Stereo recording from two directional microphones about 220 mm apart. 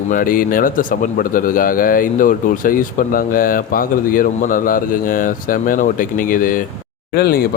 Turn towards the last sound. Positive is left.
turn(degrees=45)  # may be behind; listen again after turning